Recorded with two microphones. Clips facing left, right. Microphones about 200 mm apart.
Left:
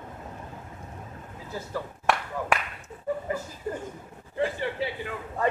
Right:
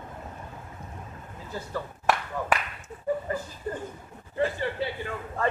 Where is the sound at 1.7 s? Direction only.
Centre (ahead or behind).